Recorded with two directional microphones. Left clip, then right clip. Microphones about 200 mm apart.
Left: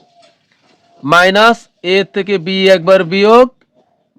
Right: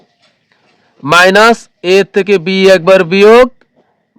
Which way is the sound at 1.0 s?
35° right (ahead or behind).